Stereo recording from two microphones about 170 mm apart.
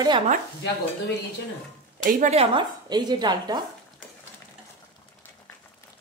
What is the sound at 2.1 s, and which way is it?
Speech, 55° right (ahead or behind).